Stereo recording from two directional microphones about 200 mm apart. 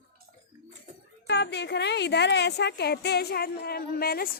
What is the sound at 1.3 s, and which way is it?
Speech, 60° left (ahead or behind).